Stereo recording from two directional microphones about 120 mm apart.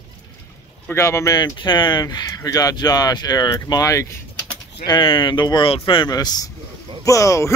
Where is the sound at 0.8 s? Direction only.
20° left (ahead or behind).